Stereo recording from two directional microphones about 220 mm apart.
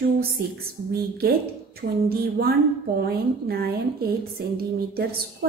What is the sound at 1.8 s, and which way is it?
A woman's voice, 45° right (ahead or behind).